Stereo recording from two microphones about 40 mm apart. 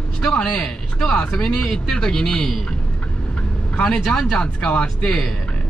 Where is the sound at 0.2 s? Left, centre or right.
Left.